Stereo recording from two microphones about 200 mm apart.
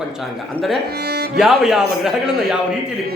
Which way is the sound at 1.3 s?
Centre (ahead or behind).